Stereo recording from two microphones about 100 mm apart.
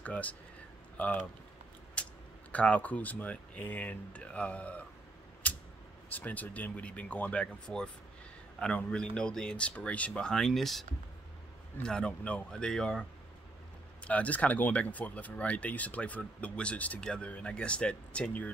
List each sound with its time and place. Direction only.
0.0 s speech: 15° left (ahead or behind)
2.0 s a sound: 10° left (ahead or behind)
2.5 s speech: 15° left (ahead or behind)
5.4 s a sound: 15° left (ahead or behind)
6.1 s speech: 15° left (ahead or behind)
14.0 s speech: 15° left (ahead or behind)